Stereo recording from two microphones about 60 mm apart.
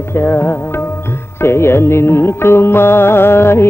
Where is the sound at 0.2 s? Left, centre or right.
Left.